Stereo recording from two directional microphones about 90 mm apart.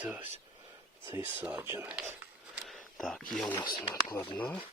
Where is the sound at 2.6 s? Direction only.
5° left (ahead or behind).